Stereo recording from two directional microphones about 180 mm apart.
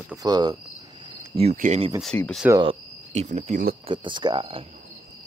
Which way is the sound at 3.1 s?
40° right (ahead or behind).